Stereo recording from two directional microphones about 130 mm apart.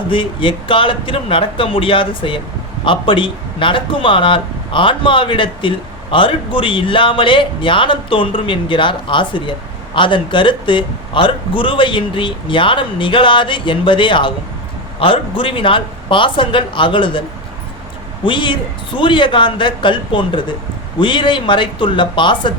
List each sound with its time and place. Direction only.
0.1 s a man's voice: 40° left (ahead or behind)
18.3 s a man's voice: 40° left (ahead or behind)